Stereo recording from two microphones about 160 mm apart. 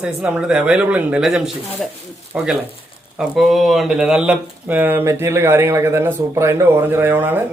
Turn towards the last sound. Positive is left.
turn(degrees=-15)  # may be behind; listen again after turning